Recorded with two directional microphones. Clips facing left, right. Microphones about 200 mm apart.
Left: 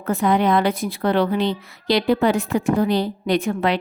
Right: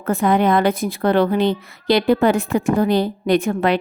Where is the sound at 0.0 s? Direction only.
50° right (ahead or behind).